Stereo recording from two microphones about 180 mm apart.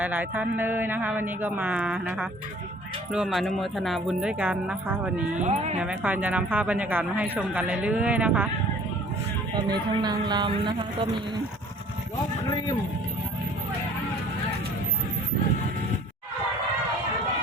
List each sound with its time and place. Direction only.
0.0 s speech: 10° right (ahead or behind)
5.4 s speech: 40° right (ahead or behind)
5.8 s speech: 5° right (ahead or behind)
9.9 s a woman's voice: 25° right (ahead or behind)